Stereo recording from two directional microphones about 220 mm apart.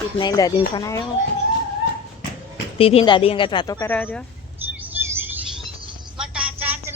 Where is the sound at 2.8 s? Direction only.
25° left (ahead or behind); by 4.2 s 10° left (ahead or behind).